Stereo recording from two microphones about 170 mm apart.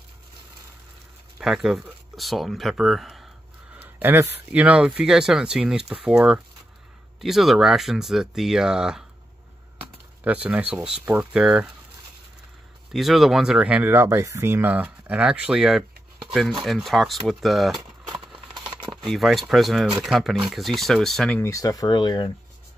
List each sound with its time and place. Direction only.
1.4 s speech: 5° right (ahead or behind)
3.7 s speech: 10° right (ahead or behind)
10.2 s speech: 10° right (ahead or behind)
12.9 s speech: centre (ahead or behind)
17.7 s a sound: 25° right (ahead or behind)
19.0 s speech: centre (ahead or behind)
21.4 s speech: 20° left (ahead or behind)